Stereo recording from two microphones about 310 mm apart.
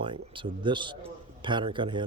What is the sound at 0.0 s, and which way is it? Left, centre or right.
A man's voice, centre.